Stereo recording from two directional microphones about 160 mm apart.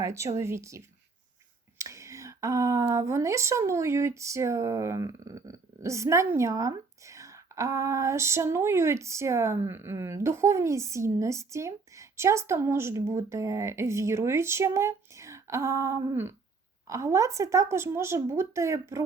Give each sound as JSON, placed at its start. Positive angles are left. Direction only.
{"t": 0.0, "sound": "speech", "side_deg": -20}
{"t": 1.8, "sound": "speech", "side_deg": -20}